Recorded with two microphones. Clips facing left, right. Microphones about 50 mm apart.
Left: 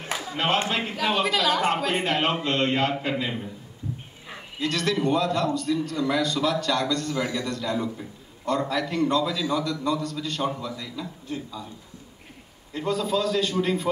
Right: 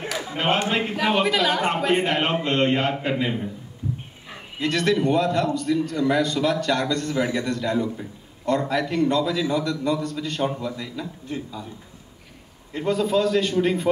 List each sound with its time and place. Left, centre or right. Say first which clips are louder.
0.2 s a man's voice: right 2 dB; right
4.6 s a man's voice: right 4 dB; right
12.7 s a man's voice: right 4 dB; right